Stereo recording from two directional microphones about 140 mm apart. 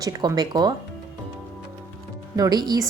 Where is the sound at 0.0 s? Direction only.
30° right (ahead or behind).